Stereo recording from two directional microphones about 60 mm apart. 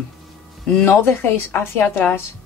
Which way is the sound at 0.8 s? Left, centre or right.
Left.